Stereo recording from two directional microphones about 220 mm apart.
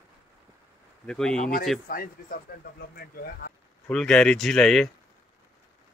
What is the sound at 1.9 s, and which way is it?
Speech, 40° left (ahead or behind).